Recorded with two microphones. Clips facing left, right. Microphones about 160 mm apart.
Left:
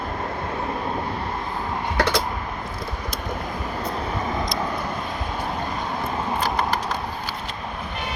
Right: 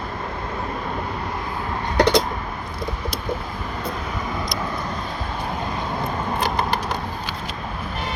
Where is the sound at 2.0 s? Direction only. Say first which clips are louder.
Right 6 dB; 15° right (ahead or behind).